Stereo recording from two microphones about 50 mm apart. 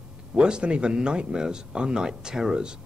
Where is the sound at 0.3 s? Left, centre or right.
Centre.